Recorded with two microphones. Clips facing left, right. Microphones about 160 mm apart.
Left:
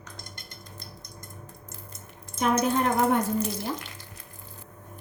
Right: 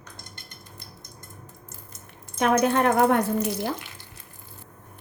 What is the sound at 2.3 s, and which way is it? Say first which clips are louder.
Speech: right 3 dB; 65° right (ahead or behind).